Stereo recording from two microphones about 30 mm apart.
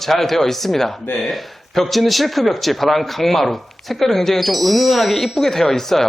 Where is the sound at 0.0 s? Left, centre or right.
Centre.